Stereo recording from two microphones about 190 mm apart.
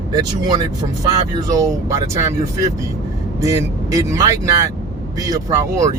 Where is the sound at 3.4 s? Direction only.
15° right (ahead or behind).